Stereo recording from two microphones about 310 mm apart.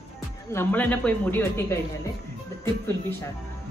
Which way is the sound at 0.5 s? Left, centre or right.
Centre.